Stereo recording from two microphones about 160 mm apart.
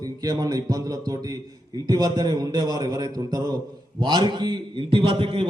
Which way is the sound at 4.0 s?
25° right (ahead or behind).